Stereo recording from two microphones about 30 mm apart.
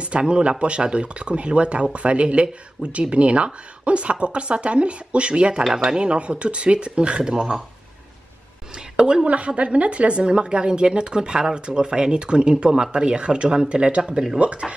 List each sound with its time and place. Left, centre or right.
0.0 s a woman's voice: right
8.7 s a sound: right
9.3 s a woman's voice: right